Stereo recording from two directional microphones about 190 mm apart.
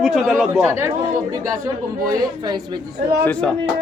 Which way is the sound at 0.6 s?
15° right (ahead or behind).